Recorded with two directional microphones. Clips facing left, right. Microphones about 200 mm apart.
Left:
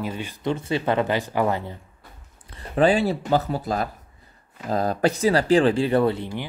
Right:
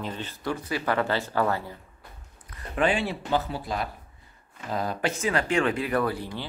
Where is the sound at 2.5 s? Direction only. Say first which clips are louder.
Left 6 dB; 30° left (ahead or behind).